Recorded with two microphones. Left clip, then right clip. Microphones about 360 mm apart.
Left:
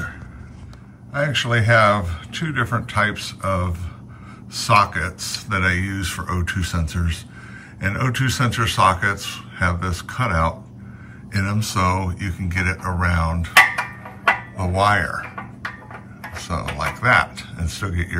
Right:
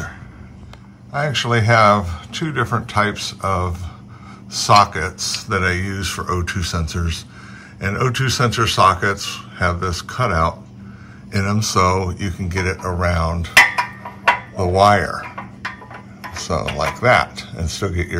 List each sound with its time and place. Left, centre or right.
1.1 s speech: centre
14.2 s a sound: centre
16.3 s speech: centre